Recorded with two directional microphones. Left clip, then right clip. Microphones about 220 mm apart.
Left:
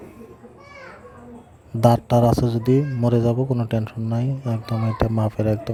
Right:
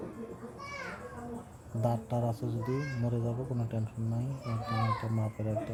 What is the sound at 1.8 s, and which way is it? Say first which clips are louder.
Speech: left 16 dB; 45° left (ahead or behind).